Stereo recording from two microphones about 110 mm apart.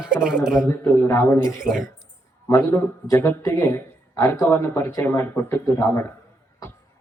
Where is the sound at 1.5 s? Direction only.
5° right (ahead or behind).